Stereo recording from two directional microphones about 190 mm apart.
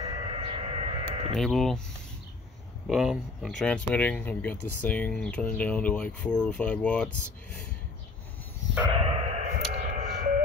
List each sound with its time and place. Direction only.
0.0 s sheep: 30° right (ahead or behind)
1.4 s speech: centre (ahead or behind)
2.9 s speech: centre (ahead or behind)
8.9 s a sound: 30° right (ahead or behind)